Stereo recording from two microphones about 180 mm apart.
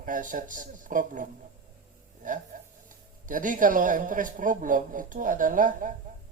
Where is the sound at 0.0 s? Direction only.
45° right (ahead or behind).